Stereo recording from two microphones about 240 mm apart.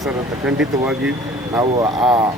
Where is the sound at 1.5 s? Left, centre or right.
Centre.